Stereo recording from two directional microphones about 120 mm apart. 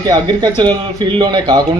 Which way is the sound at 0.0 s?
35° right (ahead or behind).